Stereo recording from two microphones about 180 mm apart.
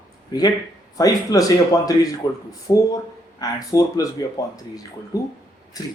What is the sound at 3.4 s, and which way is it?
Speech, 20° left (ahead or behind).